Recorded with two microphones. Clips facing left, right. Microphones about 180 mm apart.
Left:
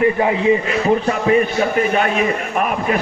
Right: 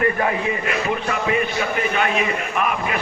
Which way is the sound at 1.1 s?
35° left (ahead or behind).